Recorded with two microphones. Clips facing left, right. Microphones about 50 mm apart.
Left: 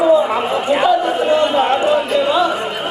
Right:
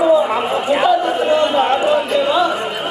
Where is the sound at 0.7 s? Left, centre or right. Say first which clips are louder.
Even; centre.